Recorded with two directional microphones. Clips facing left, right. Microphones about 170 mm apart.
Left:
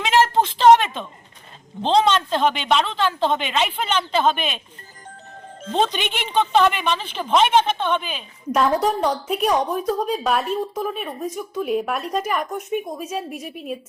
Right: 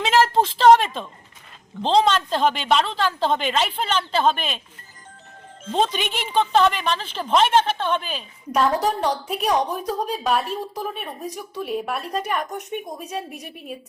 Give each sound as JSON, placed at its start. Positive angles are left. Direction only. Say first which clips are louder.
{"t": 0.1, "sound": "a sound", "louder": "left 1 dB", "side_deg": 0}
{"t": 1.8, "sound": "speech", "louder": "left 1 dB", "side_deg": 0}
{"t": 5.7, "sound": "speech", "louder": "left 1 dB", "side_deg": 0}